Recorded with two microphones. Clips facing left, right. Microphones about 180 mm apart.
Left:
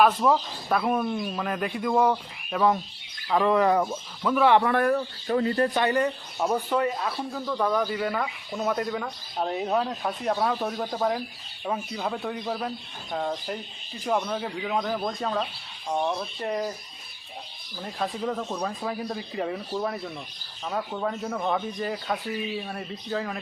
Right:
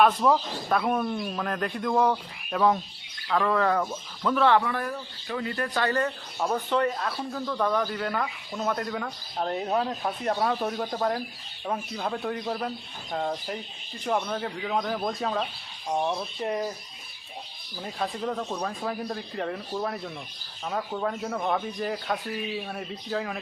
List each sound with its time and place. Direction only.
0.0 s speech: centre (ahead or behind)
3.2 s speech: 15° left (ahead or behind)
4.6 s speech: 60° left (ahead or behind)
5.3 s speech: 35° left (ahead or behind)
5.8 s speech: 15° left (ahead or behind); by 16.7 s centre (ahead or behind)
17.8 s speech: centre (ahead or behind)